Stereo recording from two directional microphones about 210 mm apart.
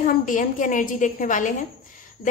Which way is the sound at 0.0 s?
40° left (ahead or behind).